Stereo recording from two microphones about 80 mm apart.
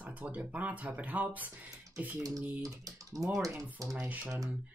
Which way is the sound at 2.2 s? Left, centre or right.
Right.